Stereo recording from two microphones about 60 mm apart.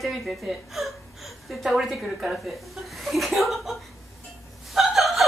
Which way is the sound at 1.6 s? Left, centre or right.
Centre.